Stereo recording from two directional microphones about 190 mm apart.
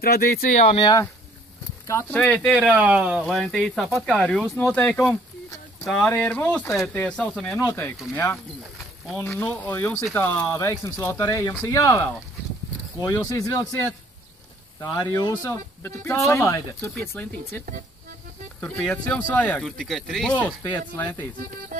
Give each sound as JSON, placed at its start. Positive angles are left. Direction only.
{"t": 0.0, "sound": "speech", "side_deg": 55}
{"t": 0.7, "sound": "speech", "side_deg": 25}
{"t": 1.9, "sound": "speech", "side_deg": 10}
{"t": 2.6, "sound": "speech", "side_deg": -5}